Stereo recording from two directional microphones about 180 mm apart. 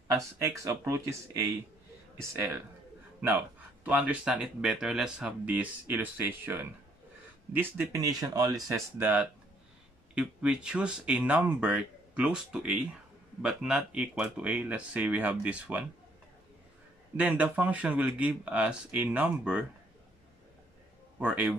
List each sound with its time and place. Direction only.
0.2 s speech: 15° right (ahead or behind)
17.2 s speech: 10° right (ahead or behind)
21.2 s speech: 5° right (ahead or behind)